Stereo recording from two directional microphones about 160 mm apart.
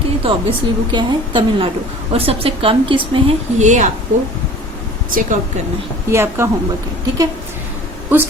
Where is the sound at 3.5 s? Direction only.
50° right (ahead or behind).